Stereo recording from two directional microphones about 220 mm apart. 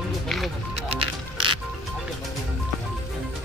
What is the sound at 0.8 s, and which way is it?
Music, 25° right (ahead or behind).